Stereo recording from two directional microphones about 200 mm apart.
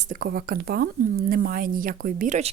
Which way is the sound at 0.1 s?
45° right (ahead or behind).